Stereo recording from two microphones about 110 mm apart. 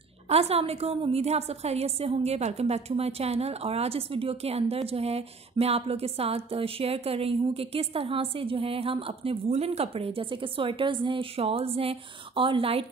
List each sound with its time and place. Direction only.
0.3 s a woman's voice: 65° right (ahead or behind)